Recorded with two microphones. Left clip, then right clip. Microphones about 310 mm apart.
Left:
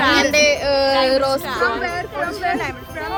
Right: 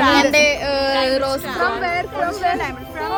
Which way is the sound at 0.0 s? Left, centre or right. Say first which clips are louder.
Right 1 dB; centre.